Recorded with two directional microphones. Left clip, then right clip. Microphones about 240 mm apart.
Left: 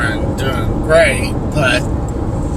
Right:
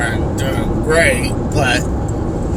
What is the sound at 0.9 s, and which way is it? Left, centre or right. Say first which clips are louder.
Speech: left 3 dB; centre.